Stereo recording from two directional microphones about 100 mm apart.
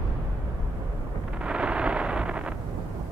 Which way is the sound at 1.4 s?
10° right (ahead or behind).